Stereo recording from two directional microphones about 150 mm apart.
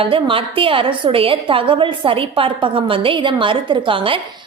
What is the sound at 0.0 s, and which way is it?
A woman's voice, 35° right (ahead or behind).